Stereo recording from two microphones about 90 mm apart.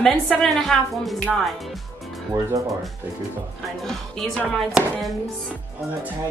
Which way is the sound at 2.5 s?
40° right (ahead or behind).